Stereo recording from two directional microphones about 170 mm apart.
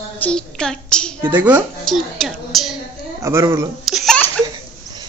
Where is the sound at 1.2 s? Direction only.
10° right (ahead or behind).